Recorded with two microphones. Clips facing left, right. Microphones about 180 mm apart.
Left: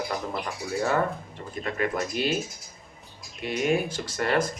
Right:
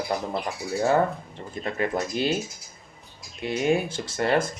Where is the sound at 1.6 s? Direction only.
25° right (ahead or behind).